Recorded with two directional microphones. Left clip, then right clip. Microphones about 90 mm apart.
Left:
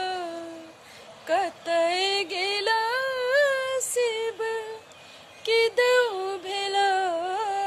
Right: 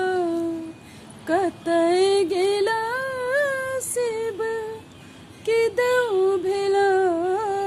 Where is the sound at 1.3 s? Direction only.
10° left (ahead or behind).